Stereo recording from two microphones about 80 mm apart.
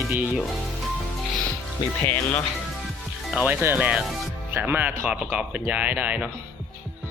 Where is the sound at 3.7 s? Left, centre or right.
Centre.